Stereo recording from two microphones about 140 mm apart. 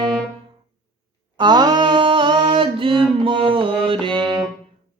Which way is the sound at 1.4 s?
30° right (ahead or behind).